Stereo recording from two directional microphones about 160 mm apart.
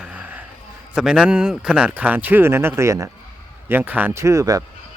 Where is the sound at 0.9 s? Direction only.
5° right (ahead or behind); by 4.6 s 20° right (ahead or behind).